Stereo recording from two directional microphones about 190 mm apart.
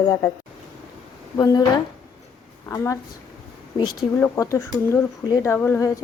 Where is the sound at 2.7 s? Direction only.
15° left (ahead or behind).